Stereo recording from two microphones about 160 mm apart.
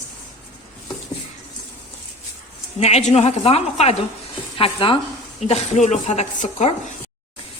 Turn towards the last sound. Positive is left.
turn(degrees=45)  # may be behind; listen again after turning